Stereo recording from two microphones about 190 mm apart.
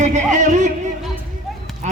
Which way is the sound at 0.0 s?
40° right (ahead or behind).